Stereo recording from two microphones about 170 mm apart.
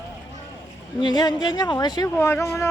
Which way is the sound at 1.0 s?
25° left (ahead or behind).